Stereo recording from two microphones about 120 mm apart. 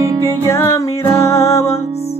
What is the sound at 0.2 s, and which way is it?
Music, 20° left (ahead or behind).